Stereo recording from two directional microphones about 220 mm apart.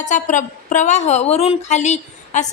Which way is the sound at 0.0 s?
35° left (ahead or behind).